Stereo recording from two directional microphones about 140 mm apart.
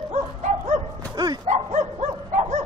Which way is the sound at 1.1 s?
30° right (ahead or behind).